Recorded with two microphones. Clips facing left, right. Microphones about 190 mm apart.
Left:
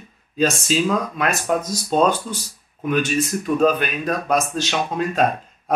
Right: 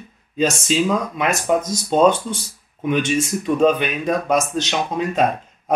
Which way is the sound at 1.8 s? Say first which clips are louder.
Right 3 dB; 20° right (ahead or behind).